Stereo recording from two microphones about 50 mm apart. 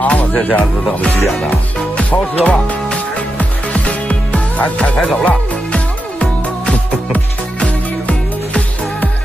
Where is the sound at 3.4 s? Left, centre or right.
Left.